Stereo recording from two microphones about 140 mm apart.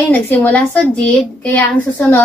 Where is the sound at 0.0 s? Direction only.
10° left (ahead or behind).